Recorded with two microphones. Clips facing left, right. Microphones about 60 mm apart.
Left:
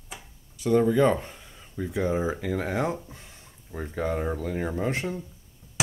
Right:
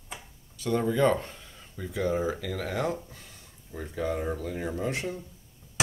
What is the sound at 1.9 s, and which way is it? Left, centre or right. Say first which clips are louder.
Speech: left 1 dB; left.